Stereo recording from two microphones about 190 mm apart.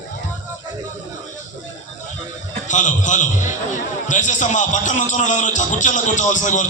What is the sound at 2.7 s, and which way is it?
A man's voice, 40° left (ahead or behind).